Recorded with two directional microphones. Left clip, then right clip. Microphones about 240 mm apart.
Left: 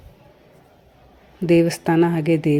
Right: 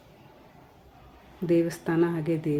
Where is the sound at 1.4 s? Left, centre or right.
Left.